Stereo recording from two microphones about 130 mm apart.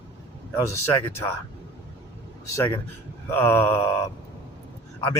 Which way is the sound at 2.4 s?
25° left (ahead or behind).